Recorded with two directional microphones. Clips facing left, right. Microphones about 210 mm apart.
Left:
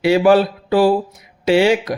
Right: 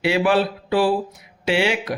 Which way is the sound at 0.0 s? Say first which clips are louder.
Left 6 dB; 40° left (ahead or behind).